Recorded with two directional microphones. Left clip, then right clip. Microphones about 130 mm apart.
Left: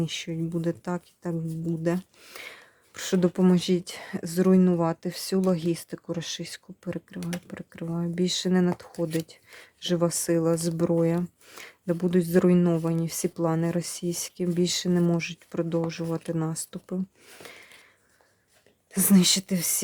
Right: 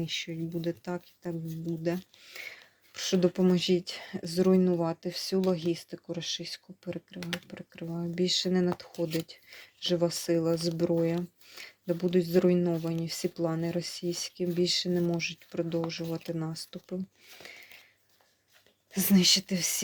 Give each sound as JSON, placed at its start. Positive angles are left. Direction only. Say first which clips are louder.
{"t": 0.0, "sound": "speech", "louder": "left 3 dB", "side_deg": 45}
{"t": 18.9, "sound": "speech", "louder": "left 2 dB", "side_deg": 35}